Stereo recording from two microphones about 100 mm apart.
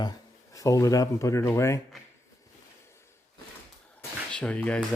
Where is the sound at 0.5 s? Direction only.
35° left (ahead or behind).